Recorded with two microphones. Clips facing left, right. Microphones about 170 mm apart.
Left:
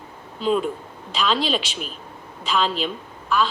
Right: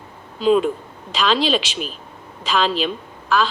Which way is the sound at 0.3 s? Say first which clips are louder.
Right 5 dB; 90° right.